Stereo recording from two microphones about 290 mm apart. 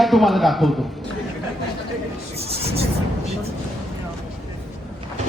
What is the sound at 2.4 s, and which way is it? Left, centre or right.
Rub, right.